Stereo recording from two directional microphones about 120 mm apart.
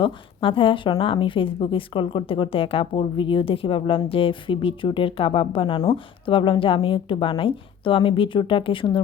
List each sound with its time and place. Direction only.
0.0 s speech: 45° left (ahead or behind)